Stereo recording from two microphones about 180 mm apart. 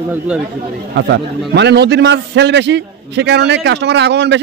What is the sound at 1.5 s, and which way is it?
A man's voice, 70° right (ahead or behind).